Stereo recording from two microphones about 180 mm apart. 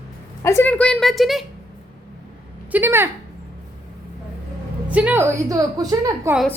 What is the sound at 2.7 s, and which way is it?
Speech, 10° right (ahead or behind).